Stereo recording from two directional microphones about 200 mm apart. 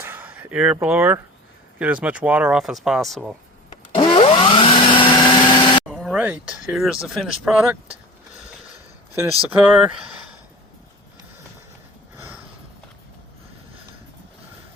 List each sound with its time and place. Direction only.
0.0 s speech: 10° right (ahead or behind)
3.9 s vacuum cleaner: 25° left (ahead or behind)
5.8 s speech: centre (ahead or behind)
9.5 s speech: 10° right (ahead or behind)